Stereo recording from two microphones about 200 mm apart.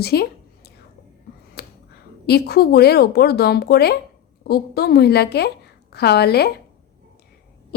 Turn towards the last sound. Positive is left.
turn(degrees=55)  # may be behind; listen again after turning